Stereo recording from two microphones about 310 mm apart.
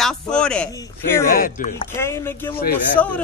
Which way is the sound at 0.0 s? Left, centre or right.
Centre.